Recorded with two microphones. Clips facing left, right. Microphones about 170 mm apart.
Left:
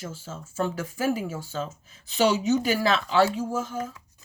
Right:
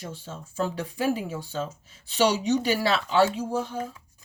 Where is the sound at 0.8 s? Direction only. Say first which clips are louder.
Right 1 dB; 40° left (ahead or behind).